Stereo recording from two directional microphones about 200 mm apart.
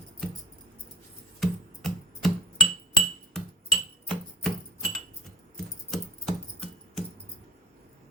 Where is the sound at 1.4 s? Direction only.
Centre (ahead or behind).